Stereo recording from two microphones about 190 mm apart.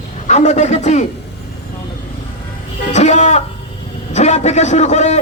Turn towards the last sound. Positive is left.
turn(degrees=35)  # may be behind; listen again after turning